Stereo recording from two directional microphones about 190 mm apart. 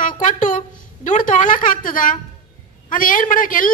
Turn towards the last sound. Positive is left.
turn(degrees=45)  # may be behind; listen again after turning